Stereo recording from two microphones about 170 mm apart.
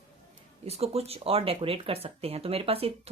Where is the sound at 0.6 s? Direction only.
35° right (ahead or behind).